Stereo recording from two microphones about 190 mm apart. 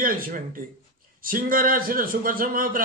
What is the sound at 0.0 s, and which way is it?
A man's voice, 45° right (ahead or behind).